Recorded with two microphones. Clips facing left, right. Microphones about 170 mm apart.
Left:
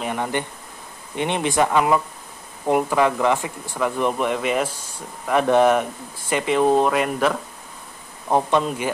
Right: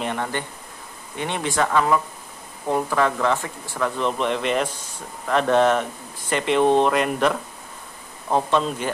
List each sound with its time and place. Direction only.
0.0 s speech: 10° left (ahead or behind)
8.3 s speech: 15° left (ahead or behind)